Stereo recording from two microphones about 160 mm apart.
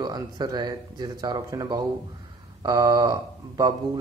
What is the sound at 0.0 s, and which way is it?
Speech, 25° right (ahead or behind).